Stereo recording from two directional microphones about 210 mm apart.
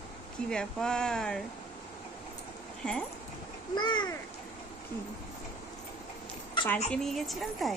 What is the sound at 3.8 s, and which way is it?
Speech, 20° left (ahead or behind).